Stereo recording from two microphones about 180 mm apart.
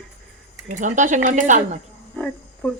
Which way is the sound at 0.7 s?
45° right (ahead or behind).